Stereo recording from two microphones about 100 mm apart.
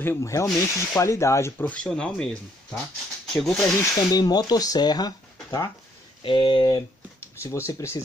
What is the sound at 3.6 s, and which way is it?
Speech, 40° left (ahead or behind).